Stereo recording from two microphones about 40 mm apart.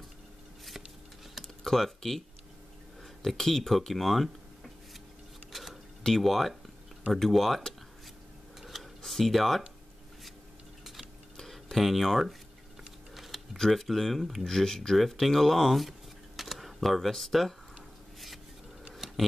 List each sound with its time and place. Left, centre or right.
1.4 s typing: centre
3.3 s speech: centre
5.5 s a sound: centre
6.0 s speech: centre
8.5 s a sound: centre
9.0 s speech: centre
11.3 s tick-tock: centre
11.8 s speech: centre
13.1 s typing: centre
13.7 s speech: centre
15.0 s speech: centre
16.3 s camera: centre
18.9 s a sound: centre